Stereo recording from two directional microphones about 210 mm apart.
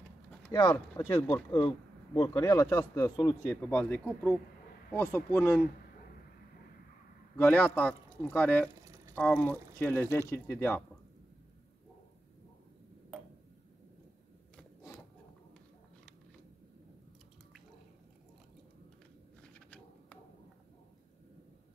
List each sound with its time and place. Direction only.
0.5 s speech: 20° left (ahead or behind)
1.1 s speech: 10° left (ahead or behind)
3.4 s speech: 5° left (ahead or behind)
7.3 s speech: 5° left (ahead or behind)
8.6 s a sound: 15° right (ahead or behind)
9.1 s speech: 5° left (ahead or behind)